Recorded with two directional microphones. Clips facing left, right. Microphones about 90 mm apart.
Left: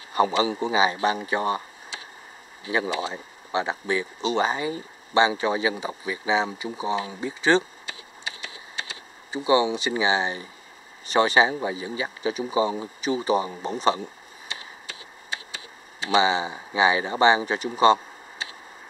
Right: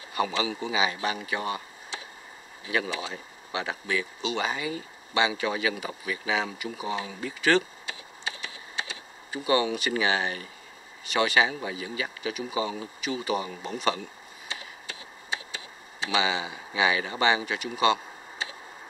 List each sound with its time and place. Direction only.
0.1 s a man's voice: 35° left (ahead or behind)
2.7 s speech: 25° left (ahead or behind)
9.3 s speech: 20° left (ahead or behind)
11.1 s speech: 30° left (ahead or behind)
16.1 s speech: 30° left (ahead or behind)